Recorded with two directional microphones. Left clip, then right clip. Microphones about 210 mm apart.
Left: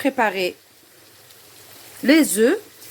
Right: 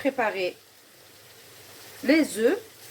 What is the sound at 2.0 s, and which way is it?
Speech, 55° left (ahead or behind).